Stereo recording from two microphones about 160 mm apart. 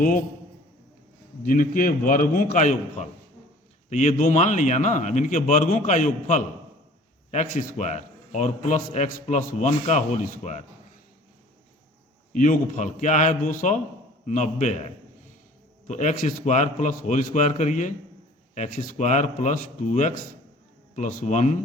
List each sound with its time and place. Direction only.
1.5 s a man's voice: 55° left (ahead or behind)
12.3 s a man's voice: 55° left (ahead or behind)